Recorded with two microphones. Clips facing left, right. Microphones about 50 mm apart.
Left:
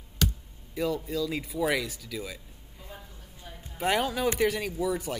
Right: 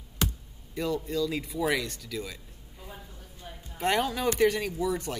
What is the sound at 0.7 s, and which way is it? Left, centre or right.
Speech, centre.